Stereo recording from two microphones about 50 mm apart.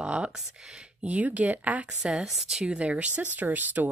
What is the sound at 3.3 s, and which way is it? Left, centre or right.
Speech, right.